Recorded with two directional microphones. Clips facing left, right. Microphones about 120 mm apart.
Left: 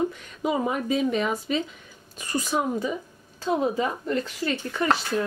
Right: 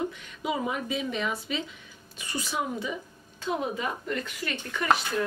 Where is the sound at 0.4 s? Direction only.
40° left (ahead or behind).